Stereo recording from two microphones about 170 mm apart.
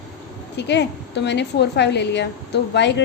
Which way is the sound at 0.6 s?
90° left.